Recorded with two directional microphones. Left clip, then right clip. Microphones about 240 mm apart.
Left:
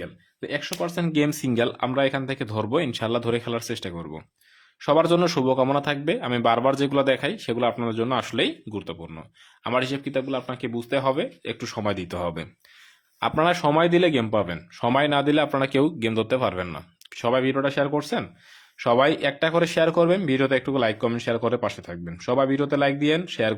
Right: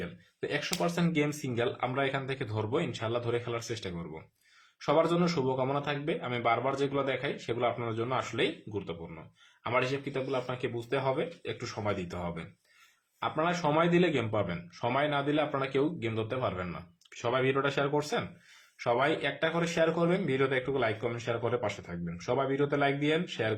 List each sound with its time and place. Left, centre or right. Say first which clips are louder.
0.0 s speech: left 3 dB; left